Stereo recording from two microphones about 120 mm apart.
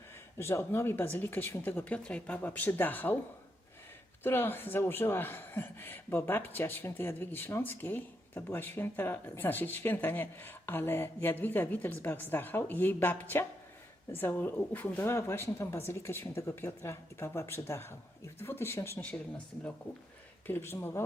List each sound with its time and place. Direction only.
0.3 s speech: 20° left (ahead or behind)
4.2 s speech: 15° left (ahead or behind)
20.5 s speech: 20° left (ahead or behind)